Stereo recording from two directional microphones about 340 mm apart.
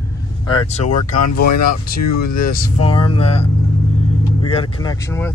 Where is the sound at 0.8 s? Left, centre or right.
Left.